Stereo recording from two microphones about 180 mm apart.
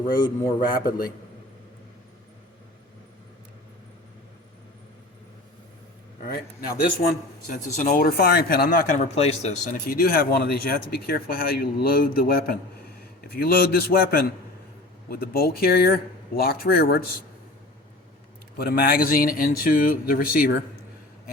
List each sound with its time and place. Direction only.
0.2 s a man's voice: 20° left (ahead or behind)
7.0 s speech: 50° left (ahead or behind)
9.8 s speech: 55° left (ahead or behind)
18.5 s speech: 60° left (ahead or behind)